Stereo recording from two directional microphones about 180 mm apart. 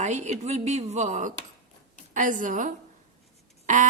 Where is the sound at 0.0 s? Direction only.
40° right (ahead or behind).